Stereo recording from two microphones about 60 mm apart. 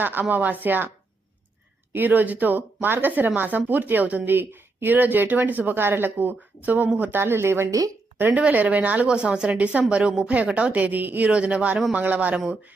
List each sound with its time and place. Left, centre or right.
0.0 s speech: right
1.9 s speech: right
8.2 s a woman's voice: right
10.3 s a woman's voice: right
11.3 s a woman's voice: centre